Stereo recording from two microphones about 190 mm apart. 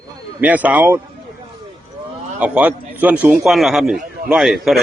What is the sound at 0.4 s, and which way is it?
Speech, 10° right (ahead or behind).